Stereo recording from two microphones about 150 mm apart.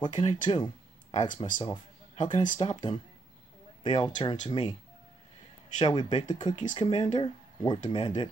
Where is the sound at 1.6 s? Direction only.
50° left (ahead or behind).